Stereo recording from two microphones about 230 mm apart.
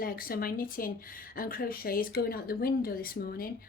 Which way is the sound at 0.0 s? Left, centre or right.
Left.